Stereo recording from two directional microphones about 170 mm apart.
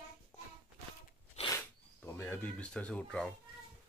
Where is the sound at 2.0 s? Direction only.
15° left (ahead or behind).